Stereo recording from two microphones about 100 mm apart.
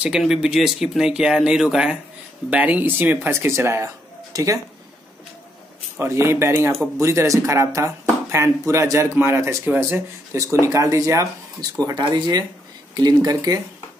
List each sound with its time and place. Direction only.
0.0 s speech: 5° right (ahead or behind); by 4.6 s 35° right (ahead or behind)
5.9 s speech: 25° right (ahead or behind)
11.8 s speech: 45° right (ahead or behind)